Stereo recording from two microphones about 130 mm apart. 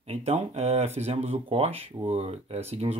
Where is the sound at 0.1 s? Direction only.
55° right (ahead or behind).